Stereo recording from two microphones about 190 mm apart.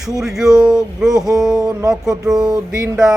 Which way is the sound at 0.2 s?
Centre (ahead or behind).